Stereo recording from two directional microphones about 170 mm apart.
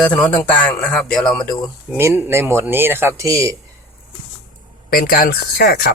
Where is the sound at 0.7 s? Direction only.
5° left (ahead or behind).